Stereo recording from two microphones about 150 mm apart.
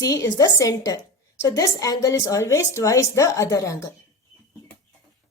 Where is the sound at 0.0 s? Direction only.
20° left (ahead or behind).